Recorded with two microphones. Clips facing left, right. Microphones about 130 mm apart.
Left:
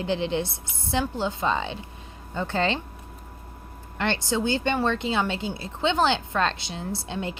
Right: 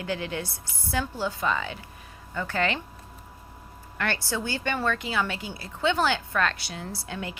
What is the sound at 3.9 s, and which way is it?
A woman's voice, 25° left (ahead or behind).